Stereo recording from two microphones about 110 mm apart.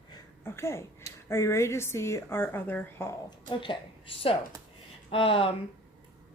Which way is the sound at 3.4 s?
45° left (ahead or behind).